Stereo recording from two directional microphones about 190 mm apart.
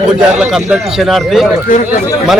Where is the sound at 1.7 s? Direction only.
45° left (ahead or behind).